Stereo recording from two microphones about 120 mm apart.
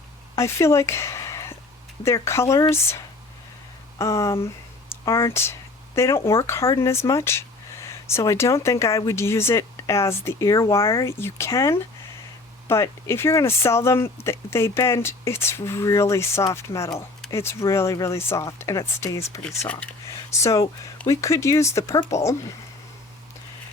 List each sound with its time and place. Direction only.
0.3 s a woman's voice: 25° left (ahead or behind)
19.5 s speech: 10° left (ahead or behind)
20.4 s speech: 25° left (ahead or behind)